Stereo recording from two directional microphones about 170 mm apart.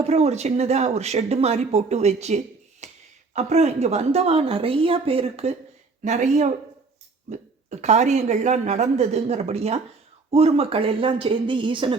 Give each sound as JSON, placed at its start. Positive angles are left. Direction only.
{"t": 0.0, "sound": "speech", "side_deg": -40}
{"t": 2.8, "sound": "a sound", "side_deg": -40}
{"t": 3.3, "sound": "speech", "side_deg": -40}